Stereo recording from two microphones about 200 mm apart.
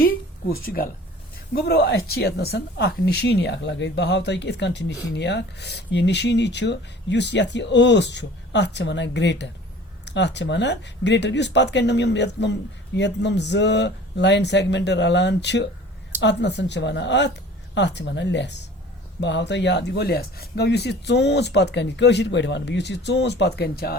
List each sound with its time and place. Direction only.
0.5 s speech: 45° left (ahead or behind)